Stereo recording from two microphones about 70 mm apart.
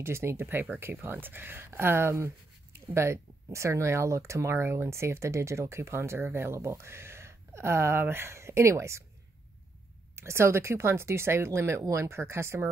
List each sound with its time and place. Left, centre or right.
0.0 s speech: right
10.1 s speech: right